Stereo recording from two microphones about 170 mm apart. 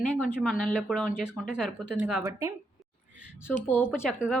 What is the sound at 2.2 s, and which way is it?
Speech, 20° right (ahead or behind).